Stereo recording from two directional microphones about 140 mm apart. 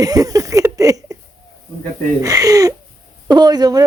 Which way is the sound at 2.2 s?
25° right (ahead or behind).